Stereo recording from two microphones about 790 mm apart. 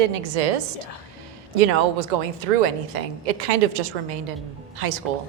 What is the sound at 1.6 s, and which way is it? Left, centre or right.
A woman's voice, right.